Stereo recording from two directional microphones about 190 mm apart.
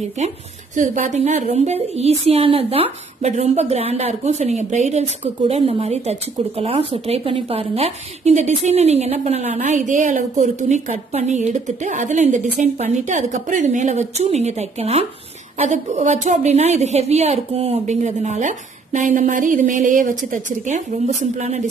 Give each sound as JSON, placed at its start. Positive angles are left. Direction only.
{"t": 0.7, "sound": "speech", "side_deg": -40}